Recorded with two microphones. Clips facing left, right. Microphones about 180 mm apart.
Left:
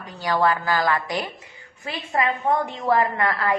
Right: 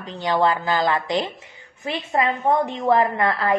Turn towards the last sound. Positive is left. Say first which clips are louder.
# right 2 dB
turn(degrees=-20)  # may be behind; listen again after turning